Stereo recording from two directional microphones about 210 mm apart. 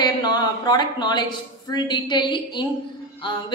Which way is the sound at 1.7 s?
20° left (ahead or behind).